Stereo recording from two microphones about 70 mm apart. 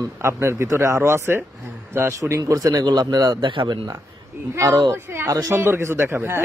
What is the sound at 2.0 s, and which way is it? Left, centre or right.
A man's voice, right.